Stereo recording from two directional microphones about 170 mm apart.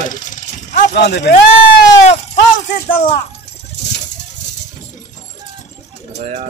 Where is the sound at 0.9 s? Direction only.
80° left.